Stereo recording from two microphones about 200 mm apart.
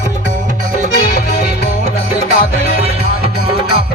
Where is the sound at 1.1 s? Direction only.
50° left (ahead or behind).